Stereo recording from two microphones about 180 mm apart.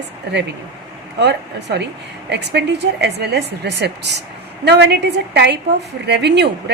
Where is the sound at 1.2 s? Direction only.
70° right (ahead or behind).